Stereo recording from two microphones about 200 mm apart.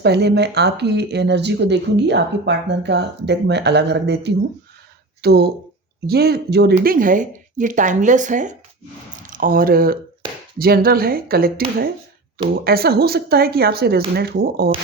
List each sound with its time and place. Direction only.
0.0 s speech: 55° right (ahead or behind)
12.6 s speech: 50° right (ahead or behind)